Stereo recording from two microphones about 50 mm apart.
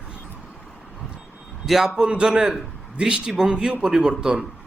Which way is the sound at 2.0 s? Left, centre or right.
Centre.